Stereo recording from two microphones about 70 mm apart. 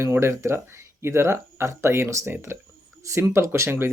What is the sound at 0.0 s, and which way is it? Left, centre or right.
Speech, right.